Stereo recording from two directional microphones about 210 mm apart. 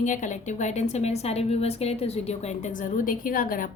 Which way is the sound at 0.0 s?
35° left (ahead or behind).